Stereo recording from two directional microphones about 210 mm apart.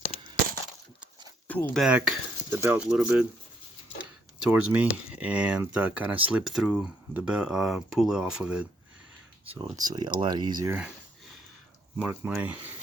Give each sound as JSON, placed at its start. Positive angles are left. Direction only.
{"t": 1.5, "sound": "speech", "side_deg": 5}
{"t": 4.4, "sound": "speech", "side_deg": -5}
{"t": 9.5, "sound": "speech", "side_deg": -20}
{"t": 11.9, "sound": "speech", "side_deg": -10}